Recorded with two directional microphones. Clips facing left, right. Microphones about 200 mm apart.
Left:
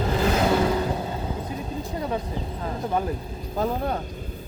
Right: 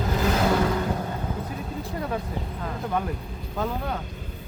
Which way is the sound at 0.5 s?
20° left (ahead or behind).